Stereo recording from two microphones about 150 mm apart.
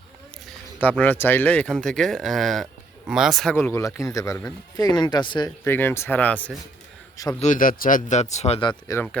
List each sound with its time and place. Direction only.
0.8 s speech: 10° left (ahead or behind)
3.5 s speech: 15° left (ahead or behind)
5.6 s speech: 15° left (ahead or behind)
7.3 s speech: 55° left (ahead or behind)
8.9 s speech: 20° left (ahead or behind)